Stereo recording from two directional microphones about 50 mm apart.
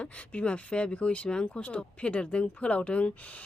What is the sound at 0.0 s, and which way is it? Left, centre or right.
Speech, left.